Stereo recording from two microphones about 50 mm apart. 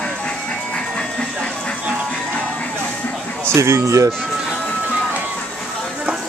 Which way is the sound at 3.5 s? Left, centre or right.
Right.